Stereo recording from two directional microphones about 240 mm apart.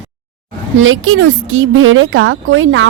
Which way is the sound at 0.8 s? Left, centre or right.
Right.